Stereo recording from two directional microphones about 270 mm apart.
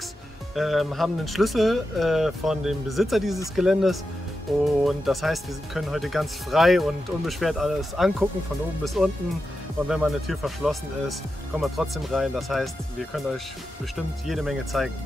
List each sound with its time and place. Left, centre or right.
0.6 s speech: centre